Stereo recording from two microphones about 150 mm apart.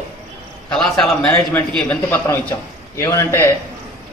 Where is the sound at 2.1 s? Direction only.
15° left (ahead or behind).